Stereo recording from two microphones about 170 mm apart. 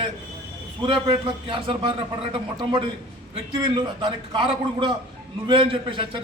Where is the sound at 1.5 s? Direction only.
30° right (ahead or behind).